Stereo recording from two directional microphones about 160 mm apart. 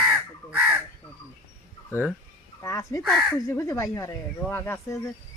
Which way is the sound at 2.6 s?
20° left (ahead or behind).